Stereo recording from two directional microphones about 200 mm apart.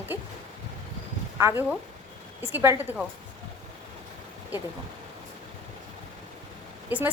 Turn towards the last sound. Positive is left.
turn(degrees=-5)  # may be behind; listen again after turning